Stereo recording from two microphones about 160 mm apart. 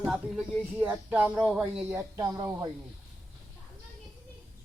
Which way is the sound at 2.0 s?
20° right (ahead or behind).